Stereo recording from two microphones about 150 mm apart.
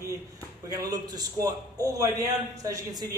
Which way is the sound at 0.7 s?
25° right (ahead or behind).